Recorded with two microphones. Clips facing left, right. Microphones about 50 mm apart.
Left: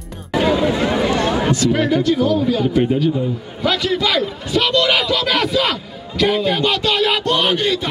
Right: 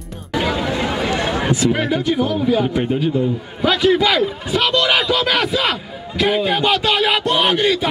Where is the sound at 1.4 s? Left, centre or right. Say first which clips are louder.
Left 1 dB; centre.